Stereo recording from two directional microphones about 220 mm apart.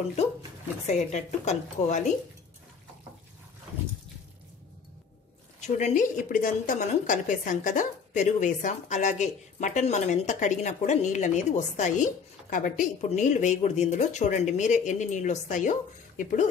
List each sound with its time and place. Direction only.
0.8 s a woman's voice: 30° left (ahead or behind)
5.6 s a woman's voice: 30° left (ahead or behind)